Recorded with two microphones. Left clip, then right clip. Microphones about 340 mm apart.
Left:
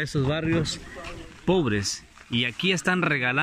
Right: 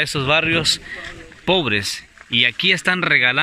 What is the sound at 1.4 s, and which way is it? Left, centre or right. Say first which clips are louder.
Speech: right 6 dB; centre.